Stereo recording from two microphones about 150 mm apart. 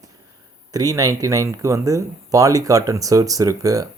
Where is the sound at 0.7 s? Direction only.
25° right (ahead or behind).